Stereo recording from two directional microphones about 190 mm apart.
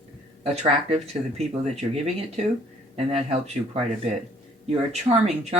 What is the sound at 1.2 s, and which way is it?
Speech, 15° right (ahead or behind).